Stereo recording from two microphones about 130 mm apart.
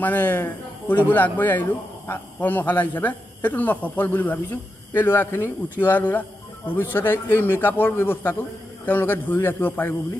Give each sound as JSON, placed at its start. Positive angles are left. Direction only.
{"t": 0.0, "sound": "a man's voice", "side_deg": 15}